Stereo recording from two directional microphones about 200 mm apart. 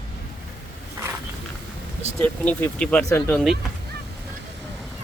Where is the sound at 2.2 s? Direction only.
5° left (ahead or behind).